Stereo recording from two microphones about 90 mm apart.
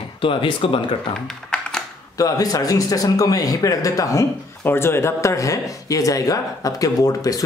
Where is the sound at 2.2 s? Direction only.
40° left (ahead or behind).